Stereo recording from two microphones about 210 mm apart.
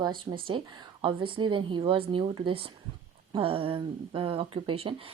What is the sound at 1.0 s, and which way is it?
Speech, 25° right (ahead or behind).